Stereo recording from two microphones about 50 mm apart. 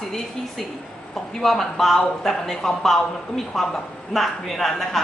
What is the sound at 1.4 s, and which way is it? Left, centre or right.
A woman's voice, centre.